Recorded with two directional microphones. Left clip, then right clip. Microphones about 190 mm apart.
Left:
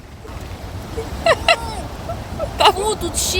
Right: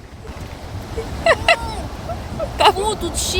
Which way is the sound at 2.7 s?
20° left (ahead or behind).